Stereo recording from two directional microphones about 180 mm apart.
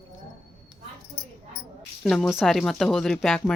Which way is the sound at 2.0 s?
Centre (ahead or behind).